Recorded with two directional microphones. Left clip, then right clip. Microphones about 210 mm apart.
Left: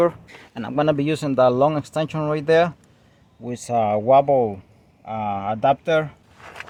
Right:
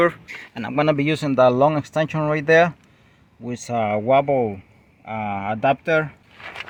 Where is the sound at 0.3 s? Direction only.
5° left (ahead or behind).